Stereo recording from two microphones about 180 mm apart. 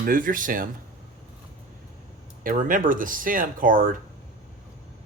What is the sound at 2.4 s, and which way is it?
Speech, 50° right (ahead or behind).